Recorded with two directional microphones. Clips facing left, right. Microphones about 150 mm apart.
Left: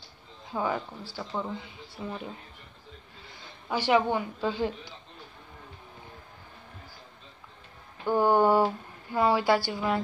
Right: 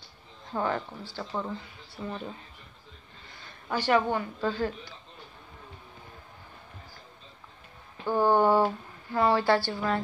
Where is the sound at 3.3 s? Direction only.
10° left (ahead or behind).